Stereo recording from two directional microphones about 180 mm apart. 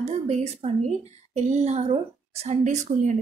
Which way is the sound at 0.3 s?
35° right (ahead or behind).